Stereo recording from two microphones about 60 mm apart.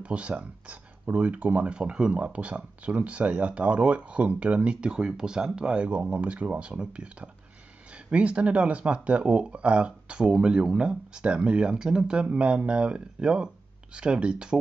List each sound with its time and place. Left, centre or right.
0.0 s speech: right